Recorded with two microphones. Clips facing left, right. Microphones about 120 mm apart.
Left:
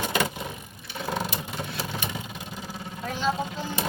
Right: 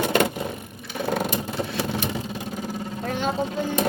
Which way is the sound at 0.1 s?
55° right (ahead or behind).